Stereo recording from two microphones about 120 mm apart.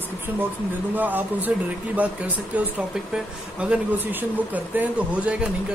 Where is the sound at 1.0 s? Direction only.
15° right (ahead or behind).